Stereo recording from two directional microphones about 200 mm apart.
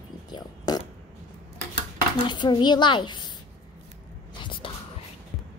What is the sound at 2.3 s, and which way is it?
Speech, 20° left (ahead or behind).